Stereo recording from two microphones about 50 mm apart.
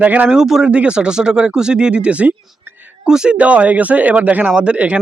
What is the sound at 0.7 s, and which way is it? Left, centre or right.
Speech, right.